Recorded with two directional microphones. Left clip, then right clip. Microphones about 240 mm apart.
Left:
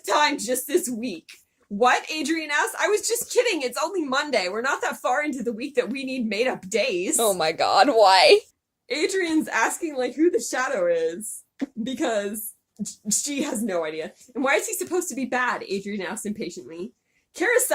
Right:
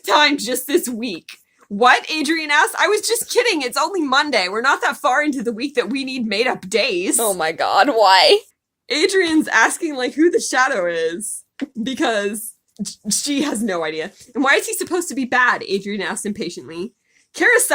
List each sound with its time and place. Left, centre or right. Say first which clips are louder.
0.0 s a woman's voice: right 6 dB; right
7.2 s speech: left 1 dB; centre
8.9 s a woman's voice: right 7 dB; right